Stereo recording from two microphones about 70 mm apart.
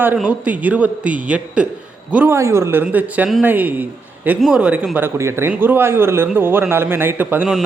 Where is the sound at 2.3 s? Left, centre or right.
Right.